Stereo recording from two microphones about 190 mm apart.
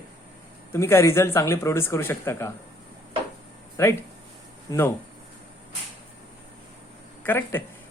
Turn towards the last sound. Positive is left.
turn(degrees=10)  # may be behind; listen again after turning